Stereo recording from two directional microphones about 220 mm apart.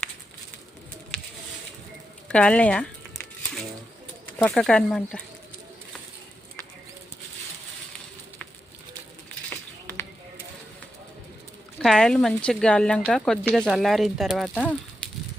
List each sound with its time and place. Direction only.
1.1 s patter: 5° left (ahead or behind)
2.2 s speech: 5° left (ahead or behind)
4.4 s speech: 5° left (ahead or behind)
11.8 s speech: centre (ahead or behind)